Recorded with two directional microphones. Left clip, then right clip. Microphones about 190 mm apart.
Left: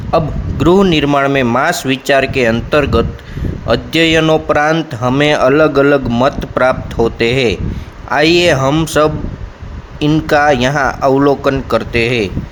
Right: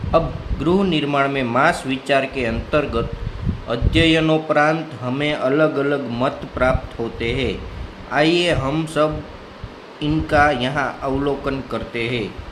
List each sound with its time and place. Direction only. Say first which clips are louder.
0.1 s speech: left 5 dB; 45° left (ahead or behind)